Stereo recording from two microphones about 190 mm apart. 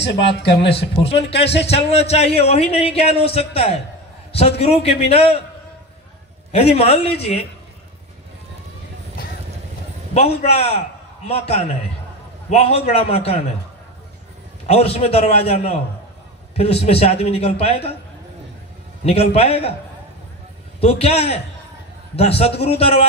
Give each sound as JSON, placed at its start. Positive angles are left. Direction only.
{"t": 0.0, "sound": "speech", "side_deg": 60}
{"t": 1.0, "sound": "a man's voice", "side_deg": 30}
{"t": 6.5, "sound": "a man's voice", "side_deg": 30}
{"t": 10.1, "sound": "a man's voice", "side_deg": 30}
{"t": 14.7, "sound": "a man's voice", "side_deg": 30}
{"t": 19.0, "sound": "a man's voice", "side_deg": 30}
{"t": 20.8, "sound": "a man's voice", "side_deg": 30}